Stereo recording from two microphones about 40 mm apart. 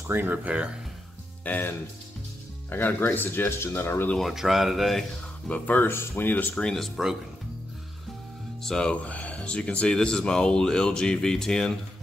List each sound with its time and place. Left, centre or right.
0.1 s speech: right
1.5 s speech: left
2.7 s speech: left
3.3 s speech: left
4.3 s speech: centre
5.5 s speech: left
5.9 s speech: left
6.5 s speech: centre
8.6 s speech: centre
8.9 s speech: left; by 11.7 s centre